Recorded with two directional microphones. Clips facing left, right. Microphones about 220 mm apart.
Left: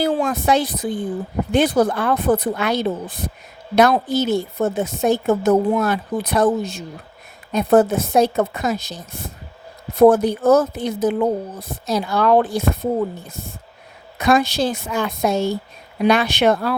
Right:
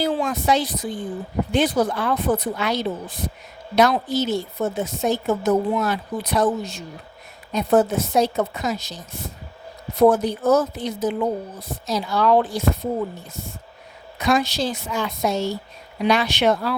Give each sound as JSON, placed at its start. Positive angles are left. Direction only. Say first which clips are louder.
{"t": 0.0, "sound": "a woman's voice", "louder": "left 3 dB", "side_deg": 55}
{"t": 10.0, "sound": "a woman's voice", "louder": "left 4 dB", "side_deg": 55}
{"t": 14.2, "sound": "a woman's voice", "louder": "left 4 dB", "side_deg": 55}